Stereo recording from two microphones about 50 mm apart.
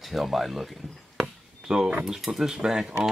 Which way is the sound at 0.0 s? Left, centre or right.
Centre.